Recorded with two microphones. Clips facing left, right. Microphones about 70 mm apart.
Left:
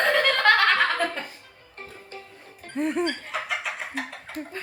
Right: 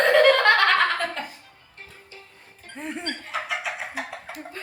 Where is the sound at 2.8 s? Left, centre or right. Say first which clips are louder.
Left 7 dB; centre.